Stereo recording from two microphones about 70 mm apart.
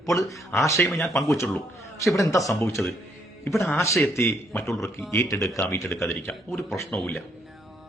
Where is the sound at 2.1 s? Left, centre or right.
Left.